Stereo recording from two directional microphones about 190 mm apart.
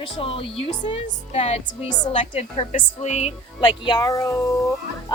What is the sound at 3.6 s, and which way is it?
Speech, 25° left (ahead or behind).